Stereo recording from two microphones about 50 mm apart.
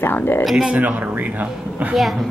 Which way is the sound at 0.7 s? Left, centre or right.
Right.